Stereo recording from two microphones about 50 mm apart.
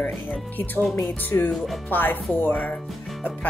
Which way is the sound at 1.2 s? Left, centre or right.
Left.